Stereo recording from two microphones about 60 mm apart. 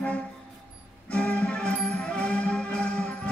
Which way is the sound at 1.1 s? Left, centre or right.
Left.